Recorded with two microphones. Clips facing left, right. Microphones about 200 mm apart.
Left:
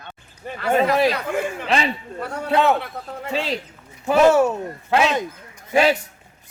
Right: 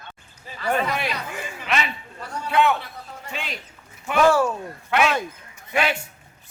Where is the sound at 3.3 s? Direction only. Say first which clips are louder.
Left 10 dB; 35° left (ahead or behind).